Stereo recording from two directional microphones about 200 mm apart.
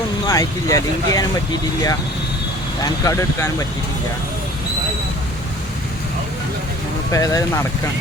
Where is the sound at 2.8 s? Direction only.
15° left (ahead or behind).